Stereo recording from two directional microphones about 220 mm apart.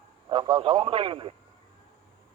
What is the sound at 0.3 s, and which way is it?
A man's voice, 20° right (ahead or behind).